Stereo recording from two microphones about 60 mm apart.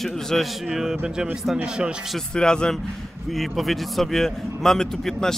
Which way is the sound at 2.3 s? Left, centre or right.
Centre.